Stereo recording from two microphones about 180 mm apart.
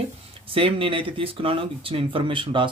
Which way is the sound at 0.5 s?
30° right (ahead or behind).